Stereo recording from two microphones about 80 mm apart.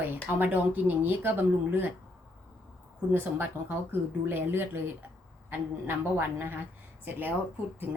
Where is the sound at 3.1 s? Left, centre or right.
Right.